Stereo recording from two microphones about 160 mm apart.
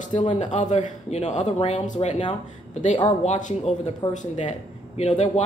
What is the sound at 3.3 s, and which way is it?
A man's voice, 50° left (ahead or behind).